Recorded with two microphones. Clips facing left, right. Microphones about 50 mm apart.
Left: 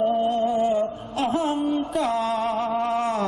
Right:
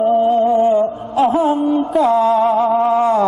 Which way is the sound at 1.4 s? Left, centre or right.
Centre.